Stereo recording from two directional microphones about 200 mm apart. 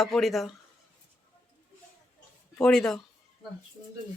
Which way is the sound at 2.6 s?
5° left (ahead or behind).